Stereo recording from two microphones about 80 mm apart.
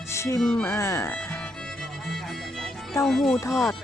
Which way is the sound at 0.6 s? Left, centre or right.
Left.